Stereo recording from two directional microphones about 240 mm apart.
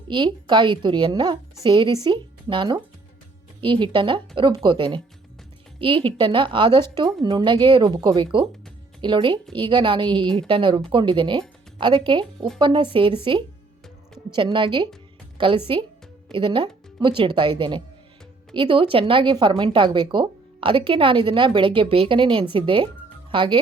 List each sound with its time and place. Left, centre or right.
0.1 s a woman's voice: centre
14.3 s speech: centre